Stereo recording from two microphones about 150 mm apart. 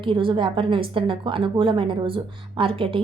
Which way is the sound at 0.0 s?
35° right (ahead or behind).